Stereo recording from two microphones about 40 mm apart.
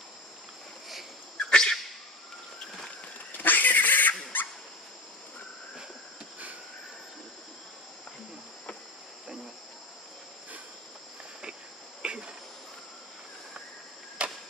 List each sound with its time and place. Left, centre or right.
1.4 s a sound: centre
3.3 s dog: left
12.0 s cricket: right
14.2 s chop: right